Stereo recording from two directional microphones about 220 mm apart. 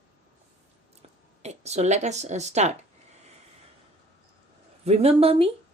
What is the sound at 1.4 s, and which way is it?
Speech, 30° right (ahead or behind).